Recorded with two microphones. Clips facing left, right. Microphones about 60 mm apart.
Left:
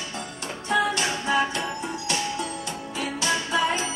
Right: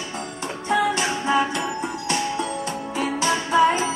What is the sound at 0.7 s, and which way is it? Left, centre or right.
Music, centre.